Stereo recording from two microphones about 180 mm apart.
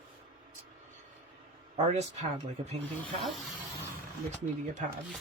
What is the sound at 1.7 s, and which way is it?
Speech, 40° right (ahead or behind).